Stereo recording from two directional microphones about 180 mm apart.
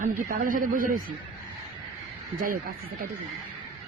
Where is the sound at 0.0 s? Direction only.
45° right (ahead or behind).